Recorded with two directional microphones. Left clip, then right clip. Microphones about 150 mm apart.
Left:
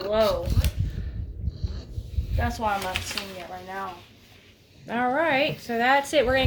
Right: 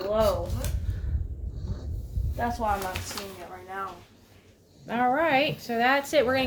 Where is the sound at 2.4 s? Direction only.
35° left (ahead or behind).